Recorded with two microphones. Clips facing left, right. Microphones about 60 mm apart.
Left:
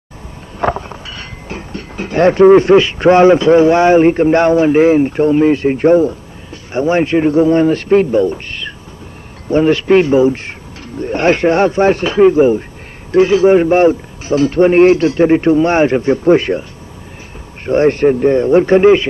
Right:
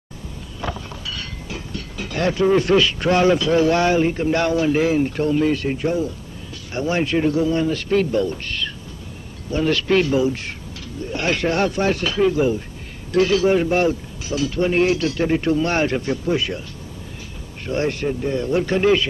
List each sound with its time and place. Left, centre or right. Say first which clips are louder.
0.6 s a sound: left 12 dB; left
4.0 s speech: left 10 dB; left
5.8 s a sound: left 12 dB; left
6.7 s a man's voice: left 8 dB; left
16.3 s speech: left 13 dB; left
17.6 s speech: left 12 dB; left